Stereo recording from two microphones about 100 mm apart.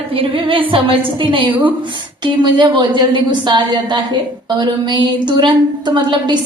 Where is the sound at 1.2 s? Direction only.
55° right (ahead or behind).